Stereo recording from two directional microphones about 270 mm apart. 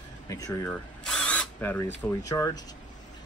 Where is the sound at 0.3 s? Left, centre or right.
Centre.